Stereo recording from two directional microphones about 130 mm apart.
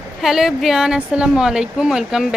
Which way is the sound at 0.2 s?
5° right (ahead or behind).